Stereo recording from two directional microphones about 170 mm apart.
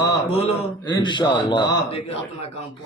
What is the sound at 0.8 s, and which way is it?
Speech, 25° left (ahead or behind).